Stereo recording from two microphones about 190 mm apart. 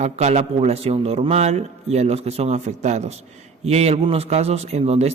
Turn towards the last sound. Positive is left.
turn(degrees=-35)  # may be behind; listen again after turning